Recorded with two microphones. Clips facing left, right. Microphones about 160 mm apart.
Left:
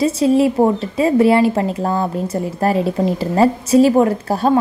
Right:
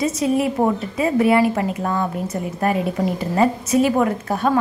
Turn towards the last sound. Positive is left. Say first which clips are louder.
# left 4 dB
turn(degrees=30)  # may be behind; listen again after turning